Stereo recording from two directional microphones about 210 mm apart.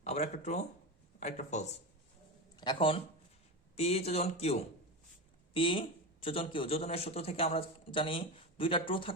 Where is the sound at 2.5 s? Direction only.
20° left (ahead or behind).